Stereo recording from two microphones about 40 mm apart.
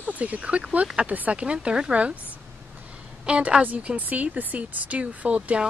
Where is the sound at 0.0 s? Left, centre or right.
Right.